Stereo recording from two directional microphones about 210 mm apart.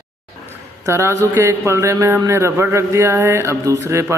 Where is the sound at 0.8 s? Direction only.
15° right (ahead or behind).